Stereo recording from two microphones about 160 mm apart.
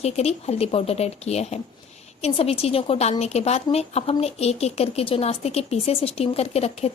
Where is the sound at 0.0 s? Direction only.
40° left (ahead or behind).